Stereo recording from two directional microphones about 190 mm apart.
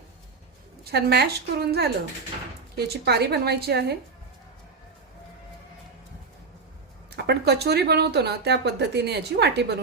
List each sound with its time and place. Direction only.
0.9 s speech: 60° right (ahead or behind)
7.1 s speech: 60° right (ahead or behind)